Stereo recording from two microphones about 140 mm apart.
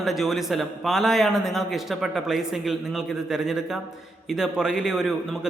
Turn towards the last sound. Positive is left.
turn(degrees=-5)  # may be behind; listen again after turning